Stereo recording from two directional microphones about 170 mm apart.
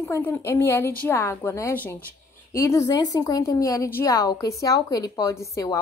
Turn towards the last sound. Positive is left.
turn(degrees=20)  # may be behind; listen again after turning